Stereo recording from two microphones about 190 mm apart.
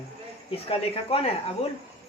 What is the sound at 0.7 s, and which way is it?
Speech, 30° left (ahead or behind).